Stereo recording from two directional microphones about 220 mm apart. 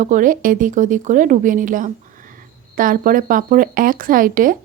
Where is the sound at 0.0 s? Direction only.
35° right (ahead or behind).